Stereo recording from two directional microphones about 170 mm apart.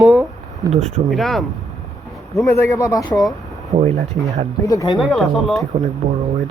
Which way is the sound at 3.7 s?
40° right (ahead or behind).